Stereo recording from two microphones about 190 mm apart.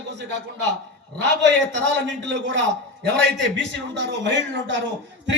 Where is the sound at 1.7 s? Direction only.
70° right (ahead or behind).